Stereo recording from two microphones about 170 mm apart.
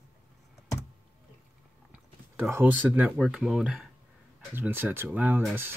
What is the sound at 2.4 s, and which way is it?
Speech, 10° right (ahead or behind).